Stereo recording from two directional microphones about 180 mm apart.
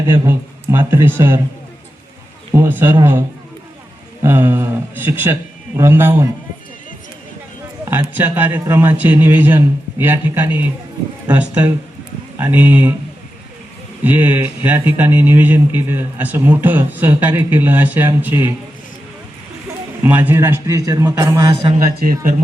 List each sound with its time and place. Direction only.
0.1 s speech: 10° right (ahead or behind)
2.6 s speech: 10° right (ahead or behind)
7.9 s speech: 10° right (ahead or behind)
14.0 s speech: 10° right (ahead or behind)
20.0 s speech: 10° right (ahead or behind)
22.0 s speech: 50° right (ahead or behind)